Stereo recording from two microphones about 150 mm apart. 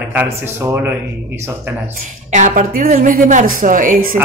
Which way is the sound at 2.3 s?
55° right (ahead or behind).